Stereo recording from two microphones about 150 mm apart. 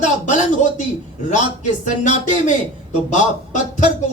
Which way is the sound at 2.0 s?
55° left (ahead or behind).